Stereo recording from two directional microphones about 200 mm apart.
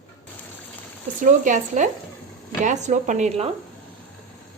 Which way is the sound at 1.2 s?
40° right (ahead or behind).